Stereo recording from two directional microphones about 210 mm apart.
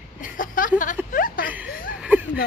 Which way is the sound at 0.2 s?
40° left (ahead or behind).